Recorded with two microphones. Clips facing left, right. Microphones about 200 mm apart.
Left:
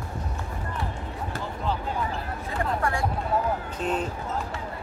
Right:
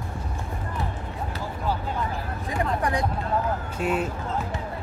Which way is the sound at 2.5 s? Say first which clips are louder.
Right 2 dB; 15° right (ahead or behind).